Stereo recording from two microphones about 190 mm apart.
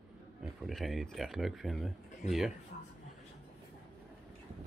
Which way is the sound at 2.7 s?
40° left (ahead or behind).